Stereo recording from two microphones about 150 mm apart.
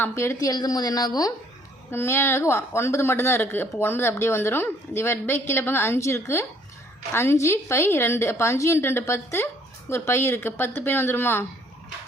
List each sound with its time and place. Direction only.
0.0 s a woman's voice: 20° left (ahead or behind)
1.9 s a woman's voice: 15° left (ahead or behind)